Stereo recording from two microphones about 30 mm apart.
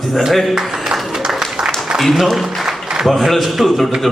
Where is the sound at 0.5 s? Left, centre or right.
Centre.